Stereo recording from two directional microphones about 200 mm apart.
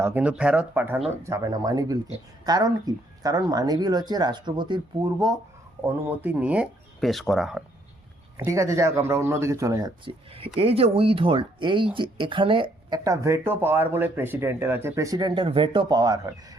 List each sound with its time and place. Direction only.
0.0 s speech: 10° right (ahead or behind)
5.8 s speech: 10° right (ahead or behind)
8.4 s speech: 15° right (ahead or behind)